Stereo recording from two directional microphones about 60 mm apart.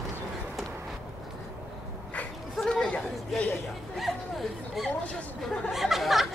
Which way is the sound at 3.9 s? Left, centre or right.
Centre.